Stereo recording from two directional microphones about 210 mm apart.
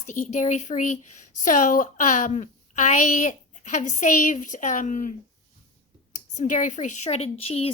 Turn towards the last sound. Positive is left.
turn(degrees=30)  # may be behind; listen again after turning